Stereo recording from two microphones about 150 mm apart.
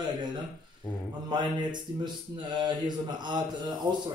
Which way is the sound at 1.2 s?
30° right (ahead or behind).